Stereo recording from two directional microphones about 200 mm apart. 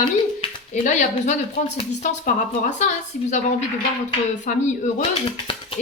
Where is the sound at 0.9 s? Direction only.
35° left (ahead or behind).